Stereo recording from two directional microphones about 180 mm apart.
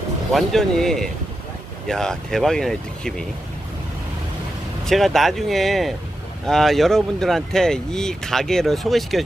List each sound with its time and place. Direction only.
0.3 s speech: centre (ahead or behind)
4.8 s speech: centre (ahead or behind)